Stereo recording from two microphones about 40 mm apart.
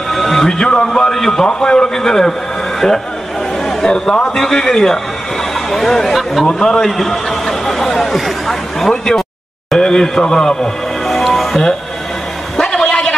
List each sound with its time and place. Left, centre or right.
0.1 s music: centre
0.5 s a man's voice: left
1.1 s a man's voice: centre
3.6 s a man's voice: centre
6.4 s a man's voice: centre
6.9 s a man's voice: centre
11.1 s music: centre
12.6 s a sound: centre